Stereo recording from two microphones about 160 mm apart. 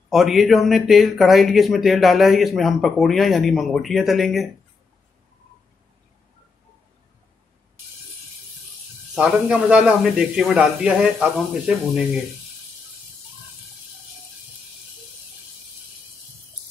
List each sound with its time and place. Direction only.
0.1 s speech: centre (ahead or behind)
9.1 s speech: 5° right (ahead or behind)